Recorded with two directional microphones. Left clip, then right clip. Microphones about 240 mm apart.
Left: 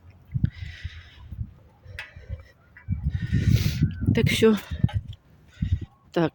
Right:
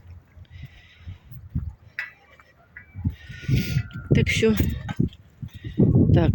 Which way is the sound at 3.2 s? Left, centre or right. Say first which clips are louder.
Left 2 dB; centre.